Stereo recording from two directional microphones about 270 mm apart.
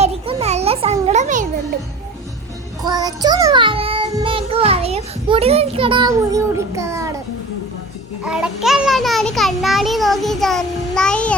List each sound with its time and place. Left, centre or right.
0.0 s a sound: right
2.8 s child singing: centre
8.2 s a child's voice: centre